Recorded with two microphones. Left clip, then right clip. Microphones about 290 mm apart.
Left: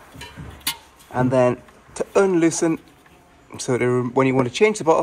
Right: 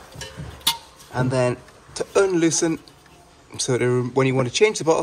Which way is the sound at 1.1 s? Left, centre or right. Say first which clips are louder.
Left 4 dB; centre.